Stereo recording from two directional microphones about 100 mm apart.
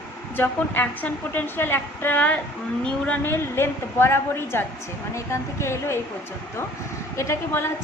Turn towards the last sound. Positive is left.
turn(degrees=25)  # may be behind; listen again after turning